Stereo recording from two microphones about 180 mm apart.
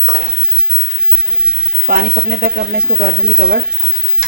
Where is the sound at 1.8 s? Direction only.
55° right (ahead or behind).